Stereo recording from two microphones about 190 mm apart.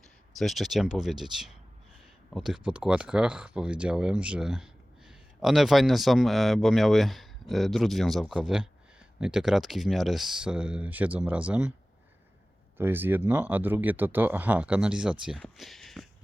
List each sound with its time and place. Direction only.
0.3 s speech: centre (ahead or behind)
12.7 s speech: 10° right (ahead or behind)